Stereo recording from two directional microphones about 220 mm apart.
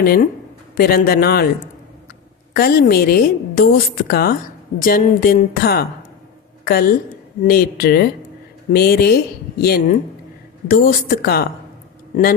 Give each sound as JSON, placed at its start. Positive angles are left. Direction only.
{"t": 0.0, "sound": "a woman's voice", "side_deg": 45}
{"t": 2.5, "sound": "a woman's voice", "side_deg": 45}